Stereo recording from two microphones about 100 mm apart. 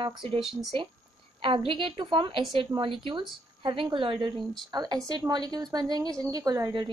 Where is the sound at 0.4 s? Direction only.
5° right (ahead or behind).